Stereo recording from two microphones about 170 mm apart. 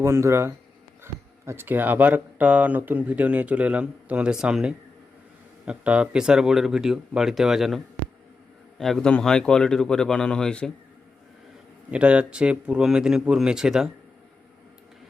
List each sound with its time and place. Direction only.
0.0 s speech: 15° right (ahead or behind)
8.8 s speech: 5° left (ahead or behind)
11.9 s speech: 5° right (ahead or behind)